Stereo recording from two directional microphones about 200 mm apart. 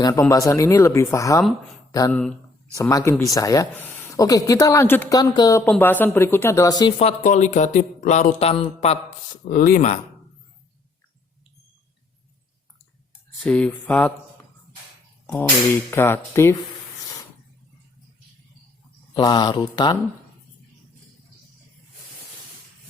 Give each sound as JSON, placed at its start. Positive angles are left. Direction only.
{"t": 0.0, "sound": "speech", "side_deg": 15}
{"t": 7.0, "sound": "speech", "side_deg": 35}
{"t": 9.4, "sound": "speech", "side_deg": 45}
{"t": 13.4, "sound": "speech", "side_deg": 5}
{"t": 15.9, "sound": "speech", "side_deg": 10}
{"t": 19.1, "sound": "speech", "side_deg": 20}